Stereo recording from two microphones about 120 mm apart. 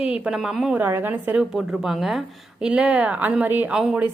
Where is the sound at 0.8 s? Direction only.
15° right (ahead or behind).